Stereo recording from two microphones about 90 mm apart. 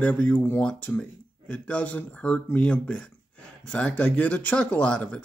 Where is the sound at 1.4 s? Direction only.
15° left (ahead or behind).